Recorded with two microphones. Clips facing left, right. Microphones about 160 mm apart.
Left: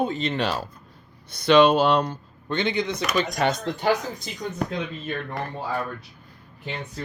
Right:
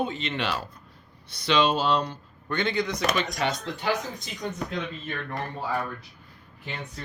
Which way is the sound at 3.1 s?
50° left (ahead or behind).